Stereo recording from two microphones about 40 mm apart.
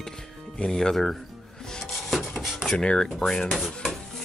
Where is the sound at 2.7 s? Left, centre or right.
Centre.